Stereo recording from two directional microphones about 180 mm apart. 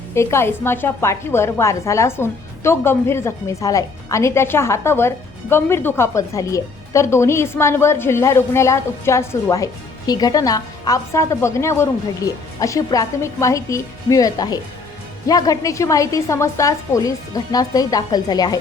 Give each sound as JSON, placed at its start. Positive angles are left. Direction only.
{"t": 0.1, "sound": "a woman's voice", "side_deg": 15}